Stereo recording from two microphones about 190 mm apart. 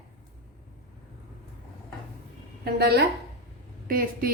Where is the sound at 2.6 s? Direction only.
55° right (ahead or behind).